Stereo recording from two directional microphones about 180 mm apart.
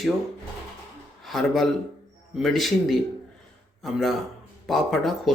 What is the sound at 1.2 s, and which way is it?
Speech, centre (ahead or behind).